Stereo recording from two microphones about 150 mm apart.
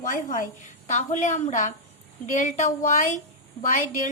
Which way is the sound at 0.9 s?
55° left (ahead or behind).